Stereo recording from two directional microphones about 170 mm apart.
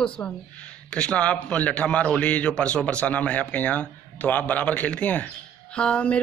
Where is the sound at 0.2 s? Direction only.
10° left (ahead or behind).